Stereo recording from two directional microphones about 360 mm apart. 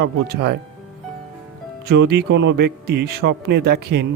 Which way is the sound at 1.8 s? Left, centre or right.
Right.